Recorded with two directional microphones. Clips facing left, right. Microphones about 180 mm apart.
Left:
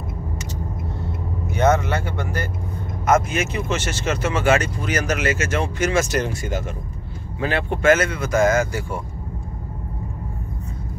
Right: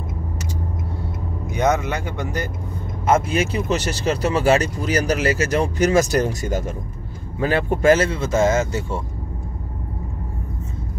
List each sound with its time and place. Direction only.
1.5 s speech: 15° right (ahead or behind)
3.1 s speech: 30° right (ahead or behind)